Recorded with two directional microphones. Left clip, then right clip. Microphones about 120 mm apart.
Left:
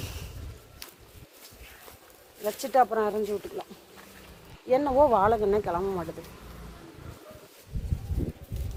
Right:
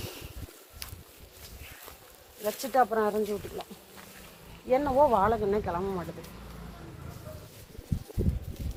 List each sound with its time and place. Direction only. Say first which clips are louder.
2.4 s speech: left 2 dB; 20° left (ahead or behind)
4.7 s speech: left 2 dB; 40° left (ahead or behind)